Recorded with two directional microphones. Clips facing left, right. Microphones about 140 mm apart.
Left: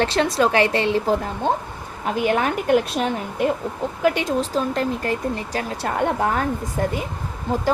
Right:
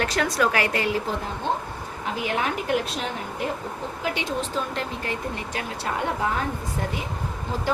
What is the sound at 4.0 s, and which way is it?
A woman's voice, 45° left (ahead or behind).